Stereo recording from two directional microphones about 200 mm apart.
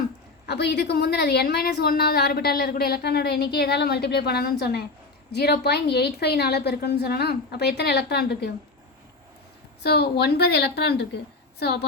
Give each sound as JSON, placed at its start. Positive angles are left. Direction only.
{"t": 0.4, "sound": "a woman's voice", "side_deg": 55}
{"t": 9.8, "sound": "a woman's voice", "side_deg": 55}